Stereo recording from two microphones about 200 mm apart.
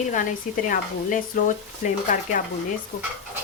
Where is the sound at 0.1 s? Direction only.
40° left (ahead or behind).